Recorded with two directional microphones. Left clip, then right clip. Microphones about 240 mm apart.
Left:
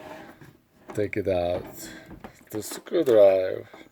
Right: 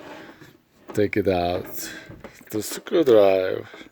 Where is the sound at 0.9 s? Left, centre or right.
Right.